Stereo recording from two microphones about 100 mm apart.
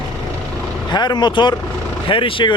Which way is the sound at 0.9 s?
45° left (ahead or behind).